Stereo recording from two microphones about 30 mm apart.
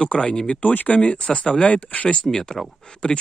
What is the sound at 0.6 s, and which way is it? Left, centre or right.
Speech, left.